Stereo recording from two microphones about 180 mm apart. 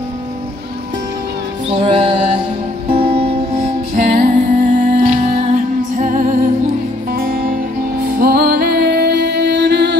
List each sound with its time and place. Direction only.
1.7 s music: 35° right (ahead or behind); by 9.9 s 70° right (ahead or behind)